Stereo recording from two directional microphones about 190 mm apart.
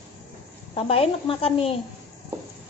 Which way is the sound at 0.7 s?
30° left (ahead or behind).